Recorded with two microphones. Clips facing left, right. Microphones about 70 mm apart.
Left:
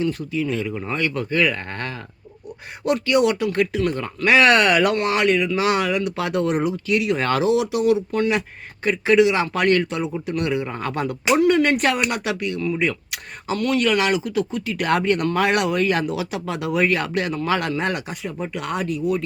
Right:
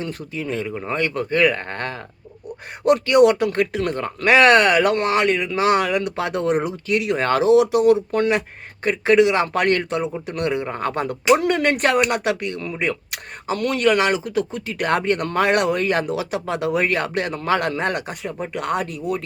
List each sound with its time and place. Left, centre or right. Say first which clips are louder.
0.0 s speech: left 5 dB; right
6.1 s speech: right 1 dB; right